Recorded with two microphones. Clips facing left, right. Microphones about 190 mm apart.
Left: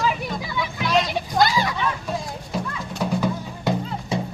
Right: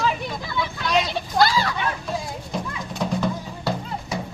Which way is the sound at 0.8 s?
Centre (ahead or behind).